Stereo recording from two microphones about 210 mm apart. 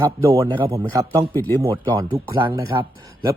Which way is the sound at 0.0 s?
15° right (ahead or behind).